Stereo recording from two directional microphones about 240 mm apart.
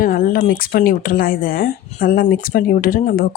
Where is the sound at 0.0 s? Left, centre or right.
Left.